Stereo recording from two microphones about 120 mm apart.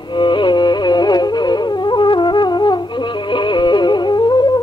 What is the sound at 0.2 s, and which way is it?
Music, 40° left (ahead or behind).